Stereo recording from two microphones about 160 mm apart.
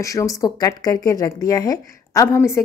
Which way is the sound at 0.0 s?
20° left (ahead or behind).